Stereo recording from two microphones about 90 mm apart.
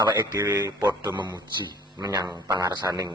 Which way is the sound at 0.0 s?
55° right (ahead or behind).